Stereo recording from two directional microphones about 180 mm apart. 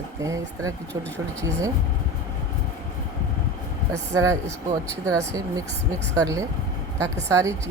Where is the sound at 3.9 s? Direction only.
15° right (ahead or behind).